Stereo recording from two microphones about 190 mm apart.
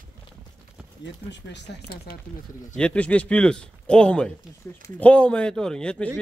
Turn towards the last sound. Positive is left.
turn(degrees=5)  # may be behind; listen again after turning